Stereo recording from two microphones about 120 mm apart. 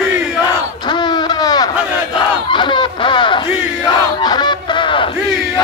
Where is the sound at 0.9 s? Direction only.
40° left (ahead or behind).